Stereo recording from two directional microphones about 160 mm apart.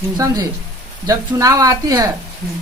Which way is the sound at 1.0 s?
20° right (ahead or behind).